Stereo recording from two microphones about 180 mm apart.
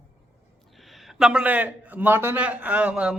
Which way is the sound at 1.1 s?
5° right (ahead or behind).